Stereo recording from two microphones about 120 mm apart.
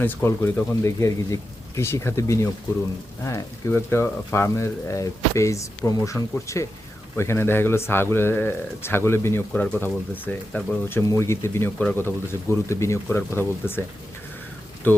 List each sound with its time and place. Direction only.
0.0 s speech: 15° left (ahead or behind)
14.8 s speech: 15° left (ahead or behind)